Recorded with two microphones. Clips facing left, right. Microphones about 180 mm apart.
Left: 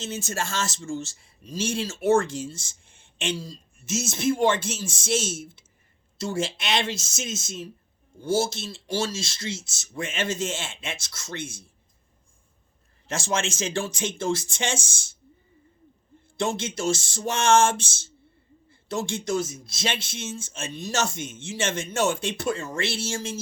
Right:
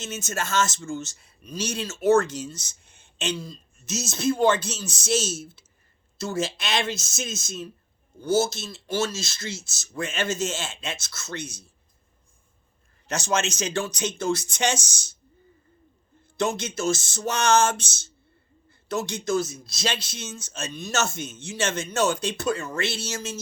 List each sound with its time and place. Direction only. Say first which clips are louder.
0.0 s speech: left 1 dB; 30° left (ahead or behind)
13.1 s speech: right 2 dB; 30° left (ahead or behind)
16.6 s speech: even; 25° left (ahead or behind)